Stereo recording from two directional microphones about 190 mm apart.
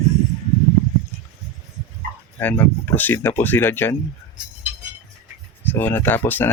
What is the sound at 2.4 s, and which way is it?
Speech, 10° left (ahead or behind).